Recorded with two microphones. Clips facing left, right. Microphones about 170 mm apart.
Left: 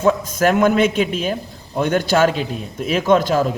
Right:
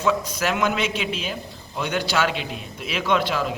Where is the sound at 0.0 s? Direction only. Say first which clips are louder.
Left 7 dB; 50° left (ahead or behind).